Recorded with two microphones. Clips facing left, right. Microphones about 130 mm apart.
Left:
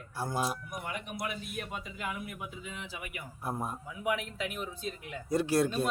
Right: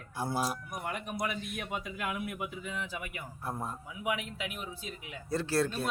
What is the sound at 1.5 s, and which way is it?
A man's voice, 60° right (ahead or behind).